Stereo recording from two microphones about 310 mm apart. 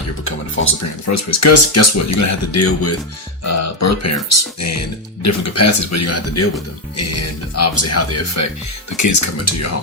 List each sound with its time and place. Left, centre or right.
0.6 s speech: left
1.0 s speech: left
3.4 s speech: left
9.0 s speech: left